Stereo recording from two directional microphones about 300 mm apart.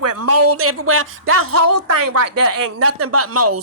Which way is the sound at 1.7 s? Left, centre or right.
Right.